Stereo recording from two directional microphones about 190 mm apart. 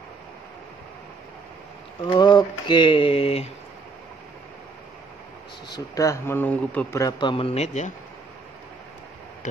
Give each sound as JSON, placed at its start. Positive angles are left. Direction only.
{"t": 2.0, "sound": "speech", "side_deg": 20}
{"t": 5.8, "sound": "speech", "side_deg": 15}